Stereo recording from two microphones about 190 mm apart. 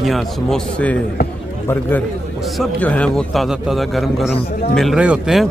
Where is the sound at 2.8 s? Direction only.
5° left (ahead or behind).